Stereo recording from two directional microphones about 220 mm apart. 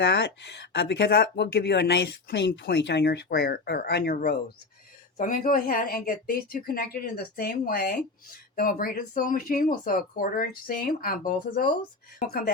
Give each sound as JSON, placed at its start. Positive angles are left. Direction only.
{"t": 0.0, "sound": "speech", "side_deg": 50}